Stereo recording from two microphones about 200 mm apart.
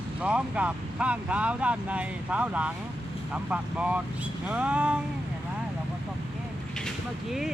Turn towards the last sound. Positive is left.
turn(degrees=0)  # may be behind; listen again after turning